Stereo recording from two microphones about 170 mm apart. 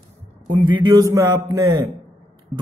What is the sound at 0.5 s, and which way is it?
Speech, 25° right (ahead or behind).